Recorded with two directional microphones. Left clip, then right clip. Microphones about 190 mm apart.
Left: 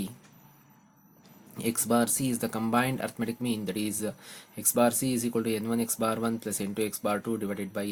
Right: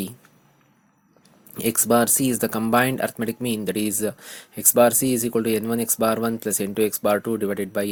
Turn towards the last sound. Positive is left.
turn(degrees=-35)  # may be behind; listen again after turning